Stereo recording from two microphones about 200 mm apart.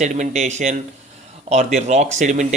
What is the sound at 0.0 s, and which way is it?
Speech, 35° right (ahead or behind).